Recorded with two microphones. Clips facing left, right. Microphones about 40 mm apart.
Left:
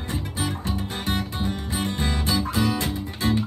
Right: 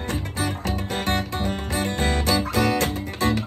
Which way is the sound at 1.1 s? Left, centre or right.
Right.